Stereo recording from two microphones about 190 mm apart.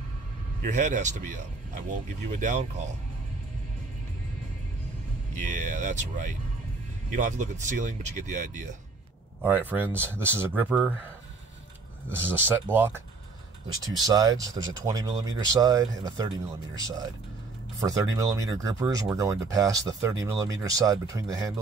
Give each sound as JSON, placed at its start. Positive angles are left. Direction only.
{"t": 0.7, "sound": "speech", "side_deg": -40}
{"t": 5.4, "sound": "speech", "side_deg": -40}
{"t": 9.4, "sound": "speech", "side_deg": -10}
{"t": 12.1, "sound": "speech", "side_deg": -10}
{"t": 18.1, "sound": "speech", "side_deg": -15}